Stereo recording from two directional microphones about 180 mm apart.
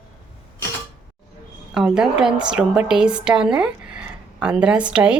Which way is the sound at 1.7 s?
5° right (ahead or behind).